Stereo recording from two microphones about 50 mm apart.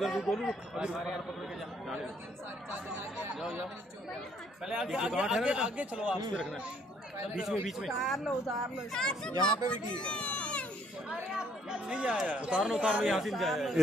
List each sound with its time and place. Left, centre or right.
0.0 s speech: centre
0.4 s speech: centre
0.9 s speech: centre
4.9 s speech: centre
7.3 s speech: centre
8.9 s a child's voice: centre
11.3 s speech: centre
12.6 s speech: centre